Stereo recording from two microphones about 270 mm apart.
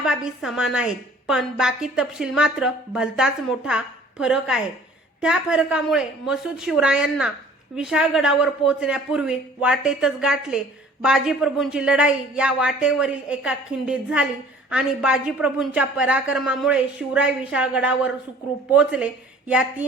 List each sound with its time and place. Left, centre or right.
0.0 s a woman's voice: centre